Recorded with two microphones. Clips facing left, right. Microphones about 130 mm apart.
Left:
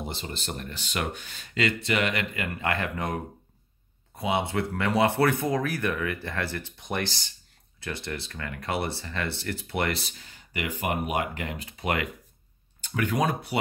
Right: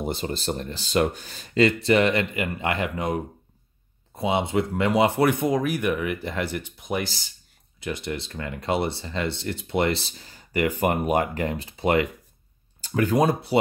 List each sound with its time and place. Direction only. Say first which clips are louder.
0.0 s speech: right 8 dB; 45° right (ahead or behind); by 3.2 s 15° right (ahead or behind)
4.2 s speech: right 4 dB; 25° right (ahead or behind)